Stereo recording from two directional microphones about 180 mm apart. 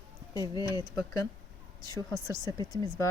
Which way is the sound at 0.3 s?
20° left (ahead or behind).